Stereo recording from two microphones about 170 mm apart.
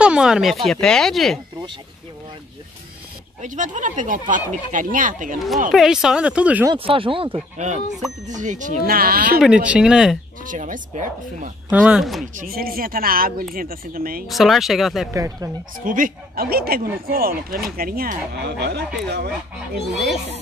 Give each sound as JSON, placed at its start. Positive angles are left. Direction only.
{"t": 0.0, "sound": "speech", "side_deg": -5}
{"t": 3.3, "sound": "speech", "side_deg": -50}
{"t": 5.7, "sound": "speech", "side_deg": -5}
{"t": 6.7, "sound": "speech", "side_deg": -30}
{"t": 7.3, "sound": "speech", "side_deg": -45}
{"t": 9.4, "sound": "speech", "side_deg": -5}
{"t": 10.4, "sound": "speech", "side_deg": -50}
{"t": 11.7, "sound": "speech", "side_deg": -5}
{"t": 12.4, "sound": "speech", "side_deg": -60}
{"t": 14.2, "sound": "speech", "side_deg": 0}
{"t": 15.1, "sound": "speech", "side_deg": -20}
{"t": 15.8, "sound": "a woman's voice", "side_deg": -50}